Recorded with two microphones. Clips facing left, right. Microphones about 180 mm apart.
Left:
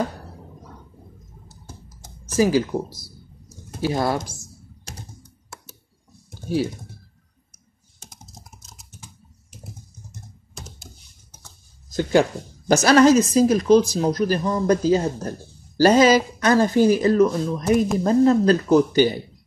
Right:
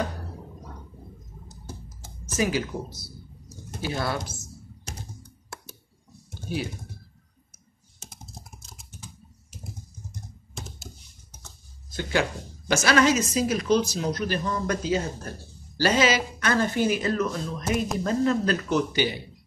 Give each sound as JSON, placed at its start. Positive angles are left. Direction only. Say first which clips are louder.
{"t": 2.3, "sound": "a woman's voice", "louder": "left 7 dB", "side_deg": 35}
{"t": 3.8, "sound": "a woman's voice", "louder": "left 7 dB", "side_deg": 40}
{"t": 11.9, "sound": "a woman's voice", "louder": "left 8 dB", "side_deg": 40}